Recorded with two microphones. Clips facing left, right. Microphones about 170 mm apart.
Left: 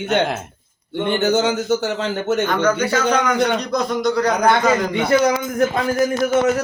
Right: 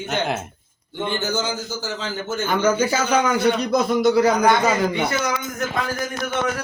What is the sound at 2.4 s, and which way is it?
A man's voice, 5° right (ahead or behind).